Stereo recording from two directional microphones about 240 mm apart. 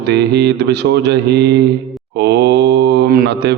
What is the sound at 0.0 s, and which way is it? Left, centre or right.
Mantra, right.